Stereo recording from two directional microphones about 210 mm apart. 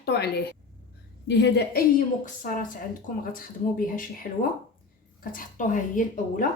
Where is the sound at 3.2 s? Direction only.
45° left (ahead or behind).